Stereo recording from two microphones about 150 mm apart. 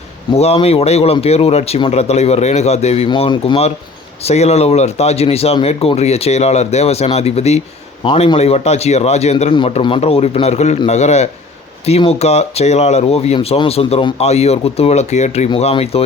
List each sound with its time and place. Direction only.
0.3 s speech: 45° left (ahead or behind)
8.0 s speech: 35° left (ahead or behind); by 15.4 s 50° left (ahead or behind)
15.4 s speech: 40° left (ahead or behind)